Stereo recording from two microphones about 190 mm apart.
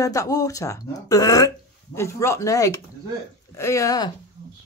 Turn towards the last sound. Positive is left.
turn(degrees=20)  # may be behind; listen again after turning